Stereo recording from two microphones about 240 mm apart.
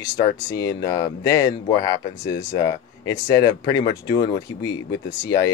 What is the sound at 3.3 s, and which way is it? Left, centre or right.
Speech, centre.